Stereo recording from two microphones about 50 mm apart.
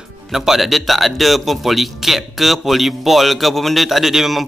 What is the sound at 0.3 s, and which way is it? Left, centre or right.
Speech, centre.